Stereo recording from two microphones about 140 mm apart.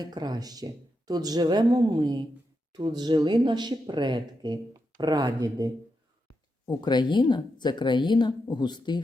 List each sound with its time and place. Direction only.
0.0 s speech: 30° right (ahead or behind)
6.7 s speech: 30° left (ahead or behind)